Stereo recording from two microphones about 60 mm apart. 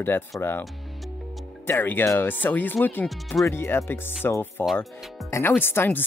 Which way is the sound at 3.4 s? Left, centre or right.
Left.